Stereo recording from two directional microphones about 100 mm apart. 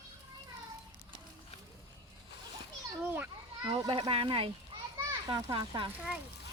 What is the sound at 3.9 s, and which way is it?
Speech, 65° right (ahead or behind).